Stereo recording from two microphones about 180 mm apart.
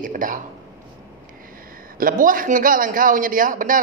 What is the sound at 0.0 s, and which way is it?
Speech, 50° right (ahead or behind).